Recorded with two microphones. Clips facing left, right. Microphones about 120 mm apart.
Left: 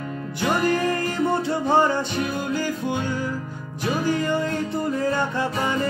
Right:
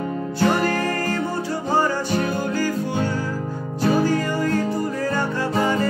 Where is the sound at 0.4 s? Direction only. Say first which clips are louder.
Right 1 dB; 15° left (ahead or behind).